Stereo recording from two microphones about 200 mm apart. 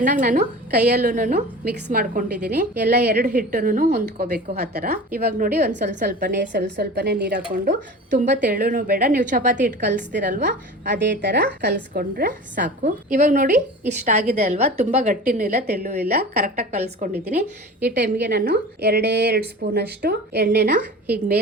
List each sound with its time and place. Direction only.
0.0 s a woman's voice: 45° right (ahead or behind)
1.0 s a woman's voice: 40° right (ahead or behind)
3.5 s a woman's voice: 40° right (ahead or behind)
10.8 s a woman's voice: 55° right (ahead or behind); by 15.6 s 35° right (ahead or behind)
16.0 s a woman's voice: 50° right (ahead or behind)
16.7 s a woman's voice: 35° right (ahead or behind)
17.8 s a woman's voice: 55° right (ahead or behind)